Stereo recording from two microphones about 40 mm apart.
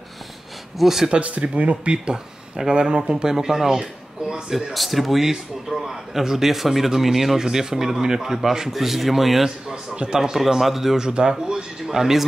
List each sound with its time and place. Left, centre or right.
0.7 s a man's voice: centre
1.1 s speech: right
1.9 s a man's voice: right
4.7 s a man's voice: centre
9.9 s a man's voice: centre
10.4 s speech: centre
11.0 s a man's voice: centre